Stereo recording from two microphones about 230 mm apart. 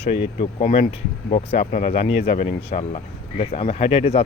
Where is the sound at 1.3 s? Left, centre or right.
Left.